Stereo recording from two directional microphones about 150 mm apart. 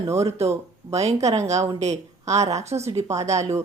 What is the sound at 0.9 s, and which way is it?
Speech, 45° right (ahead or behind).